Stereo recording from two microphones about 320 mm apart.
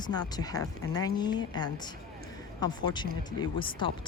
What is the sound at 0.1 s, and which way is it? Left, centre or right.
A woman's voice, centre.